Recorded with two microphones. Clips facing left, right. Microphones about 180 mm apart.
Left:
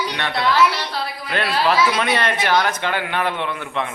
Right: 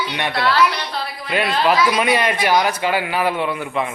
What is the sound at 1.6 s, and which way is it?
Speech, 10° right (ahead or behind).